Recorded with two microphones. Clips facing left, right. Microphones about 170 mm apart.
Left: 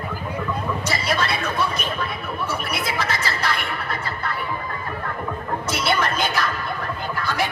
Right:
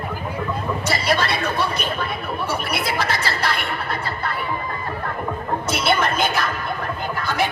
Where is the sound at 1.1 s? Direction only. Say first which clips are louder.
Right 2 dB; 35° right (ahead or behind).